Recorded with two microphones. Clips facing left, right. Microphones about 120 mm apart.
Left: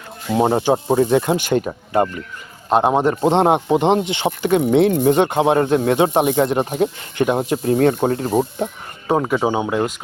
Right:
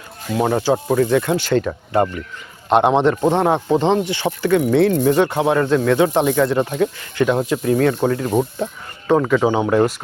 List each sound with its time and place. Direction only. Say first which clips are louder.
0.3 s a man's voice: left 1 dB; 25° left (ahead or behind); by 3.1 s 10° left (ahead or behind)
3.2 s speech: left 1 dB; 20° left (ahead or behind)
6.7 s speech: even; 35° left (ahead or behind)
7.2 s a man's voice: right 1 dB; 20° left (ahead or behind)
7.5 s speech: left 1 dB; 30° left (ahead or behind)
8.5 s speech: left 1 dB; 20° left (ahead or behind)